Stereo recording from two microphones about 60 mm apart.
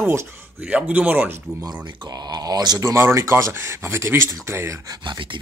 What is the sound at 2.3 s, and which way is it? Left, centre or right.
Speech, right.